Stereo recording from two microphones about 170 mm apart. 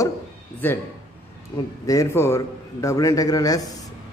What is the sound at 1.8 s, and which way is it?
A man's voice, 15° left (ahead or behind).